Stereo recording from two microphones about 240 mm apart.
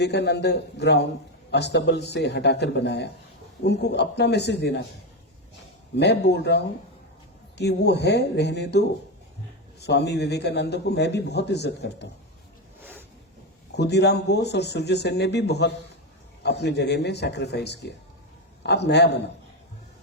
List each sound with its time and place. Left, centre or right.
0.0 s a man's voice: left
6.0 s a man's voice: left
12.8 s a sound: centre
13.7 s a man's voice: left